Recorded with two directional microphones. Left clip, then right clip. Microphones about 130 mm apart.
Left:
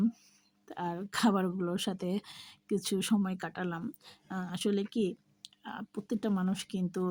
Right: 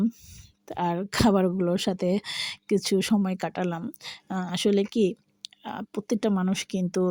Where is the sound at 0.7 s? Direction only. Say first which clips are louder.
Right 9 dB; 45° right (ahead or behind).